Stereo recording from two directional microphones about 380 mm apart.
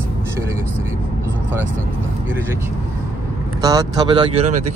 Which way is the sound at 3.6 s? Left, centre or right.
Centre.